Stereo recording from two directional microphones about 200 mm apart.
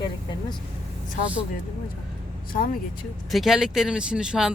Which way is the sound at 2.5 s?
45° left (ahead or behind).